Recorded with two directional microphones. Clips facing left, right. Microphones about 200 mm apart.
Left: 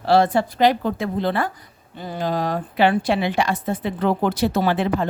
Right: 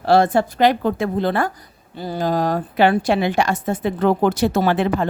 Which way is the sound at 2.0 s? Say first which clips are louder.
Right 3 dB; 40° right (ahead or behind).